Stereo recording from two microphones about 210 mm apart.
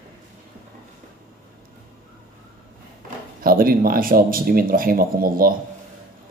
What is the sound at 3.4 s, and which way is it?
Speech, 45° right (ahead or behind).